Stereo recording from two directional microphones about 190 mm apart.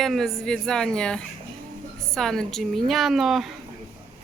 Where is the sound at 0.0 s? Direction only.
Centre (ahead or behind).